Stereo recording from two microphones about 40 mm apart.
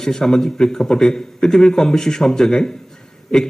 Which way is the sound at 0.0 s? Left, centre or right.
Centre.